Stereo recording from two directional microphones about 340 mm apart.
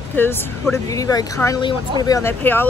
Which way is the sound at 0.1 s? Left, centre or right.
Centre.